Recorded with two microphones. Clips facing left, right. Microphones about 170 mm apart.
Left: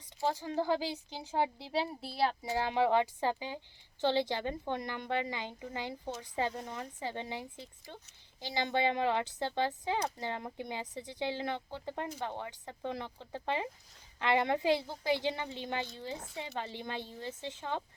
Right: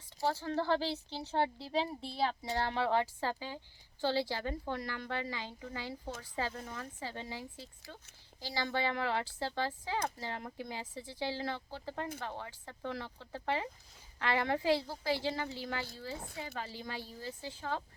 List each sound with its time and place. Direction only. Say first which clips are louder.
0.2 s speech: left 1 dB; 15° left (ahead or behind)